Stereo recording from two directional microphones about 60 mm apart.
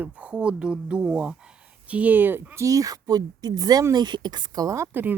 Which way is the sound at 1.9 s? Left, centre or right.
Right.